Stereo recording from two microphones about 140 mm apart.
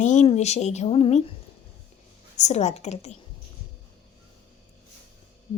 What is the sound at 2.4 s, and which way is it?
Speech, 55° left (ahead or behind).